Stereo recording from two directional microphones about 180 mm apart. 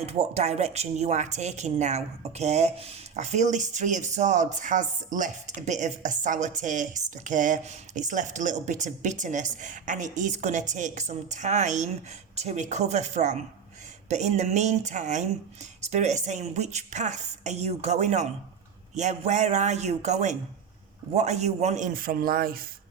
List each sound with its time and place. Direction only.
0.0 s a woman's voice: 35° right (ahead or behind); by 22.6 s 55° right (ahead or behind)